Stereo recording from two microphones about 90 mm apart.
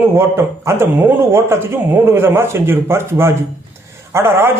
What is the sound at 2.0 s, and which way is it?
Speech, 25° right (ahead or behind).